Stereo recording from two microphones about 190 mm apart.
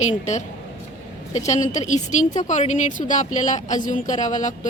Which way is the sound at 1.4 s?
40° left (ahead or behind).